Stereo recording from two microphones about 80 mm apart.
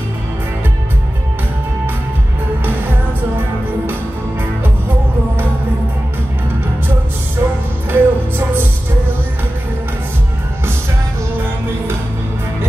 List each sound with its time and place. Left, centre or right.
7.9 s music: right